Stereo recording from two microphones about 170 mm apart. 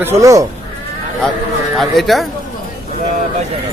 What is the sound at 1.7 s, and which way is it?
Speech, centre (ahead or behind).